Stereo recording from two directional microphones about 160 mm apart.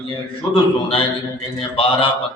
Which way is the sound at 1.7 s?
35° left (ahead or behind).